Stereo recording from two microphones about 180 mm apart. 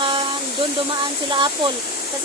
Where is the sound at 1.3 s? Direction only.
25° right (ahead or behind).